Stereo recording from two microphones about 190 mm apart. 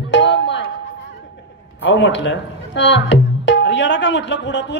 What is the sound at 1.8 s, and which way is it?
Speech, 70° left (ahead or behind).